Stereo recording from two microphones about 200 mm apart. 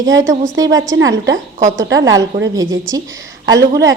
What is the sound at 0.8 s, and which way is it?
Speech, 70° right (ahead or behind).